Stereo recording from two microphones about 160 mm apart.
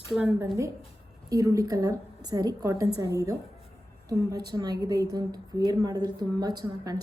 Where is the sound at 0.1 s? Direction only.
5° right (ahead or behind).